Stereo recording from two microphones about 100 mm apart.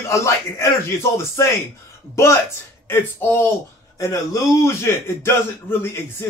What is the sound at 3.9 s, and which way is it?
A man's voice, 35° left (ahead or behind).